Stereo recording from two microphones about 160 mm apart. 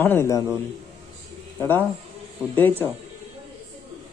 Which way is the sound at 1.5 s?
15° left (ahead or behind).